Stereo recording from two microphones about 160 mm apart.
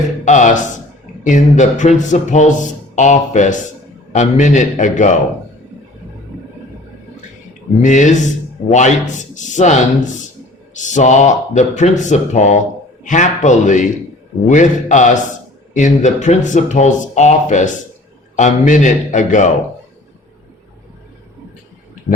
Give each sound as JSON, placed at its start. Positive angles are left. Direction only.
{"t": 0.3, "sound": "a man's voice", "side_deg": 50}
{"t": 7.8, "sound": "a man's voice", "side_deg": 50}